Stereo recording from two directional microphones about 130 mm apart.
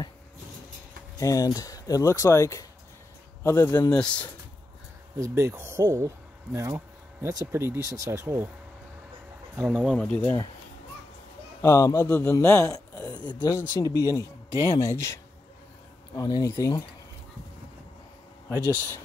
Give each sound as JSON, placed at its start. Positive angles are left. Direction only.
{"t": 1.2, "sound": "speech", "side_deg": 25}
{"t": 3.9, "sound": "speech", "side_deg": 10}
{"t": 5.1, "sound": "speech", "side_deg": -20}
{"t": 9.9, "sound": "speech", "side_deg": 10}
{"t": 11.6, "sound": "a man's voice", "side_deg": 20}
{"t": 16.2, "sound": "speech", "side_deg": 30}
{"t": 18.5, "sound": "speech", "side_deg": -15}